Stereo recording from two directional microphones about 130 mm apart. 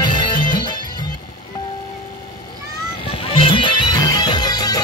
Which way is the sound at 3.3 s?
40° left (ahead or behind).